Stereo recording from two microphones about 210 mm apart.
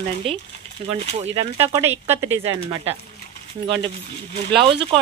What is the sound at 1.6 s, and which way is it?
Speech, 10° right (ahead or behind).